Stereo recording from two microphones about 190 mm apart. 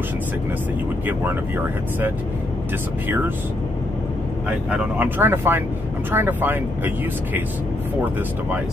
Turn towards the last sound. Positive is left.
turn(degrees=-10)  # may be behind; listen again after turning